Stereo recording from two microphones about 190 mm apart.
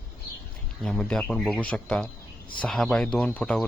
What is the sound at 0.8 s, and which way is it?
A man's voice, 5° left (ahead or behind).